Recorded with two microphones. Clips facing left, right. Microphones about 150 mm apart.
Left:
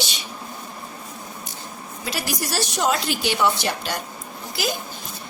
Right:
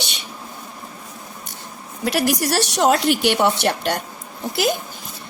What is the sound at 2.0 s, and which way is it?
Speech, 65° right (ahead or behind).